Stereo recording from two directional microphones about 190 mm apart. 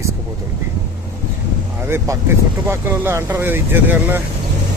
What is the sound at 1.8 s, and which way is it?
Speech, 15° right (ahead or behind).